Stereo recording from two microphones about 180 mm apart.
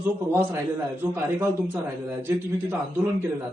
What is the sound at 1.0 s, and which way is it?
Speech, 15° right (ahead or behind).